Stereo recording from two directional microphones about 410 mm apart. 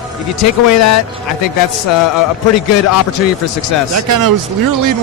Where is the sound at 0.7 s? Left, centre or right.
Left.